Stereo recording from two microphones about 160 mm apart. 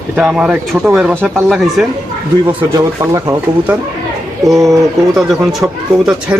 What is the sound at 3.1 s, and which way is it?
Speech, 20° right (ahead or behind).